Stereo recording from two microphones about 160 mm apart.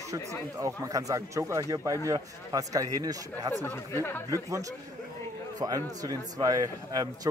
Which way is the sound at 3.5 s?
15° left (ahead or behind).